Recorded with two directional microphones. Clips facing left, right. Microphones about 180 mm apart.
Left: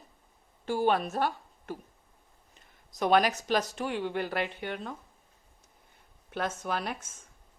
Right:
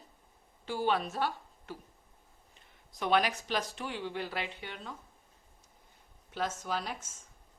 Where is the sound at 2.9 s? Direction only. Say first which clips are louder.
Left 5 dB; 45° left (ahead or behind).